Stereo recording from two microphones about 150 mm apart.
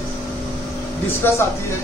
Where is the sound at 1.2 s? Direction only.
15° left (ahead or behind).